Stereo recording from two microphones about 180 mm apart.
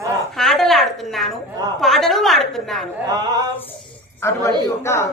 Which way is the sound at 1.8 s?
Centre (ahead or behind).